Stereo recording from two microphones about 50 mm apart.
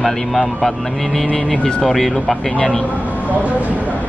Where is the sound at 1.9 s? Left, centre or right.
Centre.